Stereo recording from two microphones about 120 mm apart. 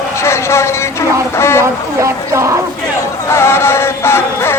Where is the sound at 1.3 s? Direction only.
20° left (ahead or behind).